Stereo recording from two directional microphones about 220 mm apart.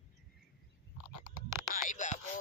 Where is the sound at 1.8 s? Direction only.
35° left (ahead or behind).